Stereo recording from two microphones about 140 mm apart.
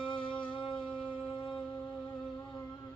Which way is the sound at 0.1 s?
35° left (ahead or behind).